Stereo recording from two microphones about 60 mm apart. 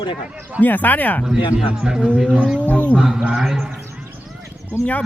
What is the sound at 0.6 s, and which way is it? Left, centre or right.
Speech, left.